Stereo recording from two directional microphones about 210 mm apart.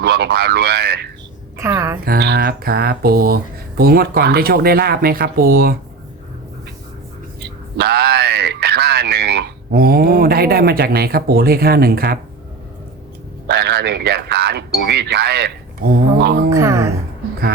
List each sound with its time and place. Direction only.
0.0 s speech: 50° right (ahead or behind)
1.5 s speech: 15° right (ahead or behind)
2.0 s speech: 50° right (ahead or behind)
7.4 s speech: 50° right (ahead or behind)
13.5 s speech: 50° right (ahead or behind)
16.5 s speech: 15° right (ahead or behind)